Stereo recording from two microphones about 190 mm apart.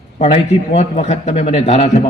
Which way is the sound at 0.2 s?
30° left (ahead or behind).